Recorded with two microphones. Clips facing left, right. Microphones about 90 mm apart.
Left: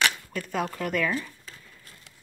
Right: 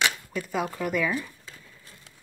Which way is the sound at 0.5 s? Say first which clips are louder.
Even; 5° right (ahead or behind).